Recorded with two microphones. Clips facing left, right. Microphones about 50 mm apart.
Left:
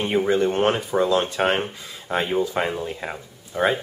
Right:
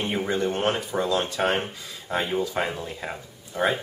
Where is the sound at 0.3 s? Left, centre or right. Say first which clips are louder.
Left 4 dB; centre.